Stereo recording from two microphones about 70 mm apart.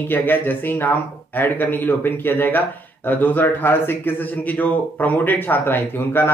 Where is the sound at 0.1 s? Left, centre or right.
Left.